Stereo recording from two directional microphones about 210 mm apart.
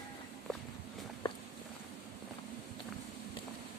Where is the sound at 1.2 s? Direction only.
25° left (ahead or behind).